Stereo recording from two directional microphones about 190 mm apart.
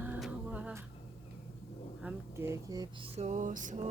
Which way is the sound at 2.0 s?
10° right (ahead or behind).